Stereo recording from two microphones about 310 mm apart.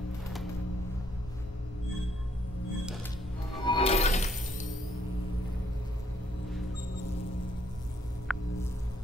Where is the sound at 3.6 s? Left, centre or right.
Centre.